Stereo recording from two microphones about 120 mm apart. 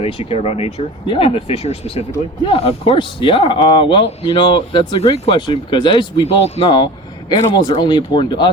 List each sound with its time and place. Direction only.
0.0 s speech: 50° left (ahead or behind)
2.4 s speech: 50° left (ahead or behind)
4.9 s speech: 60° left (ahead or behind)
5.5 s speech: 40° left (ahead or behind)
7.3 s speech: 40° left (ahead or behind)